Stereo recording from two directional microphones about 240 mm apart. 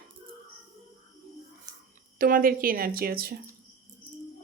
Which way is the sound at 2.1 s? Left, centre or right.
Right.